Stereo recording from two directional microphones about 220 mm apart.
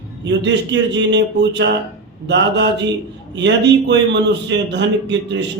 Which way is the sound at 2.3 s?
55° right (ahead or behind).